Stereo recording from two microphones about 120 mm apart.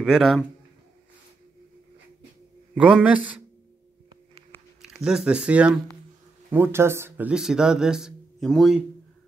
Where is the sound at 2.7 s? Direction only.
10° right (ahead or behind).